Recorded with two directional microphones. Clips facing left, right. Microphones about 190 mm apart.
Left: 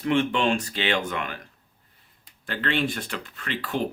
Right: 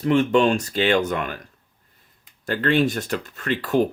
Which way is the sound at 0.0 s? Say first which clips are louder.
Right 5 dB; 40° right (ahead or behind).